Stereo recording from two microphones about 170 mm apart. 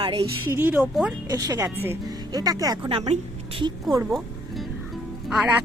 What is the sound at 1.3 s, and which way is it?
Speech, 20° right (ahead or behind).